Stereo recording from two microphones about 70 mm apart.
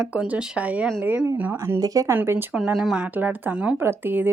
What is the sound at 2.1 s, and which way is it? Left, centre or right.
Speech, right.